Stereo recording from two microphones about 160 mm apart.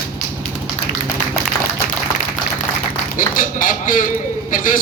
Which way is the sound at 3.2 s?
60° left (ahead or behind).